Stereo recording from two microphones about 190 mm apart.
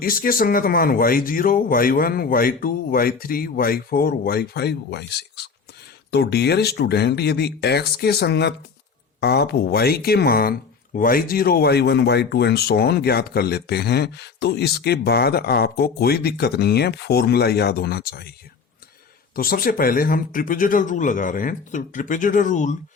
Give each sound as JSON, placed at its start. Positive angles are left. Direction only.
{"t": 0.0, "sound": "speech", "side_deg": 50}
{"t": 19.4, "sound": "speech", "side_deg": 50}